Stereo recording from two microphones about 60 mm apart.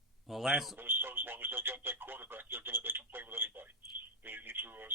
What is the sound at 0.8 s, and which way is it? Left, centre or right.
Speech, right.